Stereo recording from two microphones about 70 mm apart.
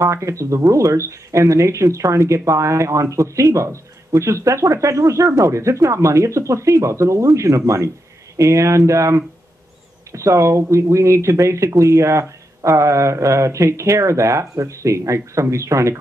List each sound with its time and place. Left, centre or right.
0.0 s speech: right